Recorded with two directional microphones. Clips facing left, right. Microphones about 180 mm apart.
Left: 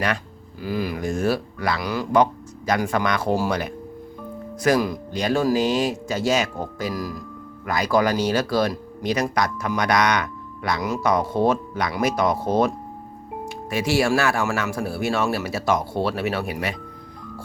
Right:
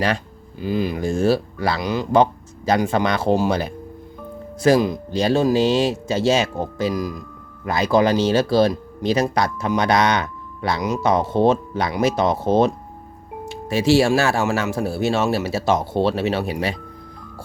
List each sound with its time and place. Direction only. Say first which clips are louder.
0.6 s speech: right 4 dB; 20° right (ahead or behind)